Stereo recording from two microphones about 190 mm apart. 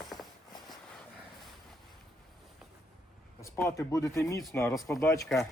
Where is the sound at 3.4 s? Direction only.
15° left (ahead or behind).